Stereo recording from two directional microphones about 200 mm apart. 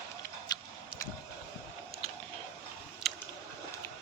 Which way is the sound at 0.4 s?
20° left (ahead or behind).